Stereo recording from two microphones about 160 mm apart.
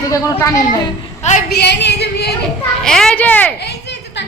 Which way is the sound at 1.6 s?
90° left.